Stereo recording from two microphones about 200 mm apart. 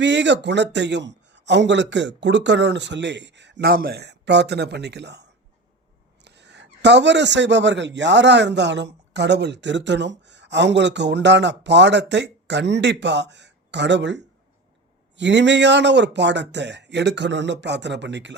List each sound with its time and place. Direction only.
0.0 s a man's voice: 60° right (ahead or behind)